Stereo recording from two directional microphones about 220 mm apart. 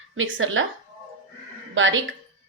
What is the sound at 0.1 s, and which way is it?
Speech, 65° right (ahead or behind).